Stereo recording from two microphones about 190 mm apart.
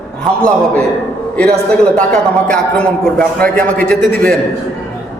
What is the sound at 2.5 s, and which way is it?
A man's voice, 5° left (ahead or behind).